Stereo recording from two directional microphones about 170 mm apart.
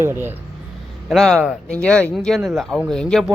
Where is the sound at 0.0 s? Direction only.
15° right (ahead or behind).